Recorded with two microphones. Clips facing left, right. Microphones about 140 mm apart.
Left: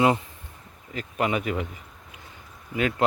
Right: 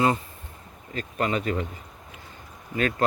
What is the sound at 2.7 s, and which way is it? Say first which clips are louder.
Speech: left 1 dB; 15° left (ahead or behind).